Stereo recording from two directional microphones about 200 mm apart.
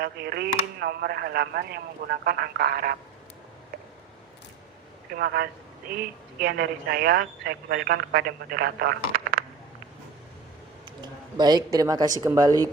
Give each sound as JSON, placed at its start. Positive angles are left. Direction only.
{"t": 0.0, "sound": "a woman's voice", "side_deg": -50}
{"t": 5.2, "sound": "a woman's voice", "side_deg": -55}
{"t": 11.0, "sound": "speech", "side_deg": -20}